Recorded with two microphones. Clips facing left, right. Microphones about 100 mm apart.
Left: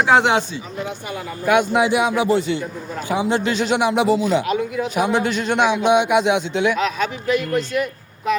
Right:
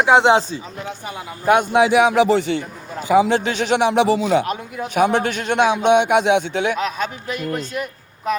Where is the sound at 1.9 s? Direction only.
80° right.